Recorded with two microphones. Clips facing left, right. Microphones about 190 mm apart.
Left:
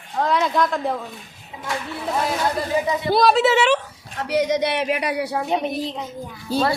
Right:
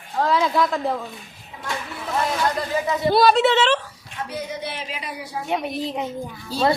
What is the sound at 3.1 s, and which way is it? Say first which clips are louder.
Speech: even; centre (ahead or behind).